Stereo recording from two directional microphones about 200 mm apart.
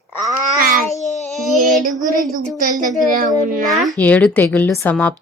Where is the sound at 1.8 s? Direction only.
45° right (ahead or behind).